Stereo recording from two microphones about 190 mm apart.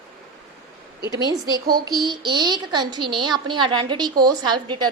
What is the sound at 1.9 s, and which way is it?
A woman's voice, 20° right (ahead or behind).